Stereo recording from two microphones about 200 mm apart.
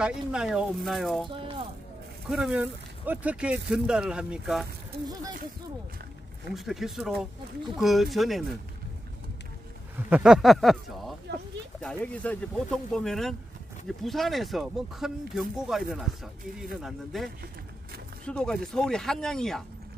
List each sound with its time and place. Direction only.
0.0 s speech: 5° right (ahead or behind)
1.3 s music: 25° right (ahead or behind)
2.2 s speech: 5° right (ahead or behind)
5.0 s speech: 20° right (ahead or behind)
6.5 s speech: centre (ahead or behind)
9.9 s speech: 10° right (ahead or behind)